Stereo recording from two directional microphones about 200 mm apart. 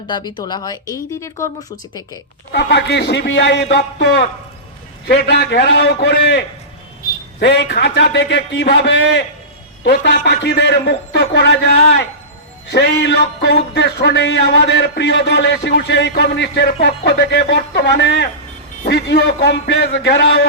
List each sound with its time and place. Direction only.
0.1 s speech: 20° left (ahead or behind)
2.5 s speech: 60° left (ahead or behind)